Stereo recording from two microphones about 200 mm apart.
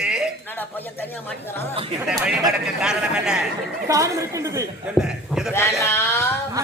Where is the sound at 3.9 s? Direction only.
15° right (ahead or behind).